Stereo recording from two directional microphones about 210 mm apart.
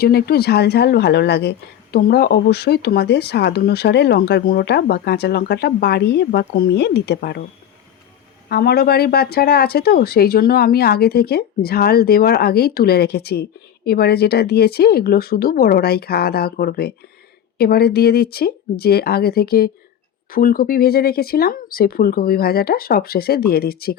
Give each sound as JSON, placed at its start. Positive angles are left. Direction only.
{"t": 0.0, "sound": "speech", "side_deg": 50}
{"t": 8.4, "sound": "speech", "side_deg": 50}